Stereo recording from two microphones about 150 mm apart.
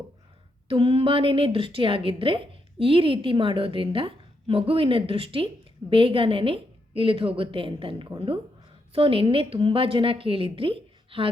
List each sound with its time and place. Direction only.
0.7 s a woman's voice: 40° right (ahead or behind)